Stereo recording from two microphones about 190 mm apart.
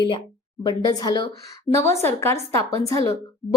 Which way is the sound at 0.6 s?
20° left (ahead or behind).